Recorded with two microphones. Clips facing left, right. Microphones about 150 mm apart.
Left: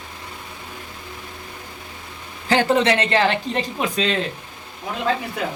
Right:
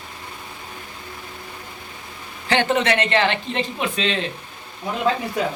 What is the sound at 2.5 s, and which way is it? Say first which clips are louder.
Speech: left 2 dB; 35° left (ahead or behind).